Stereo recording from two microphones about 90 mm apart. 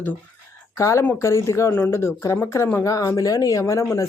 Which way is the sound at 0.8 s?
35° left (ahead or behind).